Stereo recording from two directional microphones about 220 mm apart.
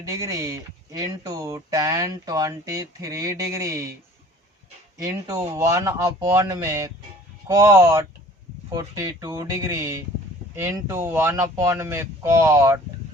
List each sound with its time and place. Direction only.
0.0 s speech: 15° right (ahead or behind)
4.9 s speech: 15° right (ahead or behind)